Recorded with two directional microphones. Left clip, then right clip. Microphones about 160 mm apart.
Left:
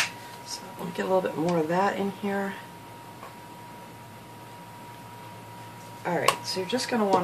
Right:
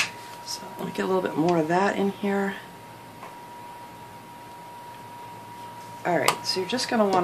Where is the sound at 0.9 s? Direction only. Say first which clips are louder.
Even; 60° right (ahead or behind).